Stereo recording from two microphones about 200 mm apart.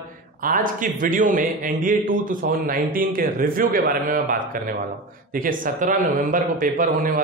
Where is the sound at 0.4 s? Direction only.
45° right (ahead or behind).